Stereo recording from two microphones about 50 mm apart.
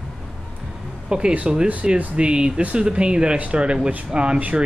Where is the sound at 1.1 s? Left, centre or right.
Centre.